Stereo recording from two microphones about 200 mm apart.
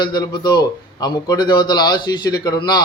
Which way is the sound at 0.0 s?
20° left (ahead or behind).